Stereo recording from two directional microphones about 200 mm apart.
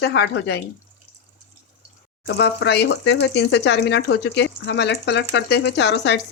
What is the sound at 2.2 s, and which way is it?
Speech, 60° left (ahead or behind).